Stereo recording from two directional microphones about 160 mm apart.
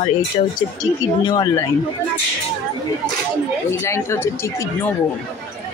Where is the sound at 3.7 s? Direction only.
15° left (ahead or behind).